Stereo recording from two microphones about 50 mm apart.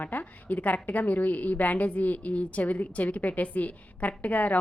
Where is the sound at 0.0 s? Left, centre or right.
Left.